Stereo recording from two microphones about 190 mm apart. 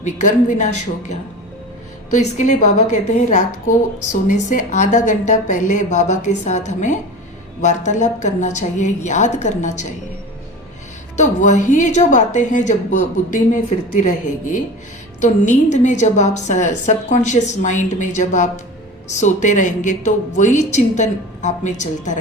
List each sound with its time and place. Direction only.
0.0 s a woman's voice: 40° left (ahead or behind)
2.1 s a woman's voice: 40° left (ahead or behind)
11.2 s a woman's voice: 40° left (ahead or behind)
15.2 s a woman's voice: 40° left (ahead or behind)